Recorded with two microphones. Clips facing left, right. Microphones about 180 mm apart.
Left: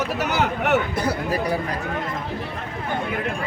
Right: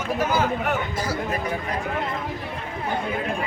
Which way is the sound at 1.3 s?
35° left (ahead or behind).